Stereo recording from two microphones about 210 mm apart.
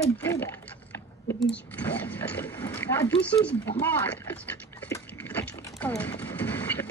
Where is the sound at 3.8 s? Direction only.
10° left (ahead or behind).